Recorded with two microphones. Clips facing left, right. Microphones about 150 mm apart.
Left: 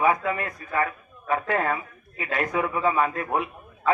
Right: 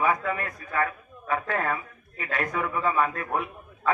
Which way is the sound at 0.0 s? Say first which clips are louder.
Left 3 dB; 15° left (ahead or behind).